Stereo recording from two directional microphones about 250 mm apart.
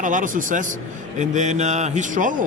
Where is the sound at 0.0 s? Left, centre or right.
Right.